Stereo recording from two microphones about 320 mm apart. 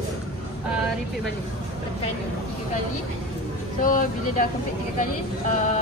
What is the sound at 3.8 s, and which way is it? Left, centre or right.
Speech, left.